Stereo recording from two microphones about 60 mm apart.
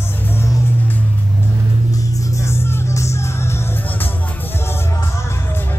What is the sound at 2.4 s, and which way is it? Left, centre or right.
Music, left.